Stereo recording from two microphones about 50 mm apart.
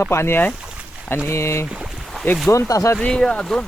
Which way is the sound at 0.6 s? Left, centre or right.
Right.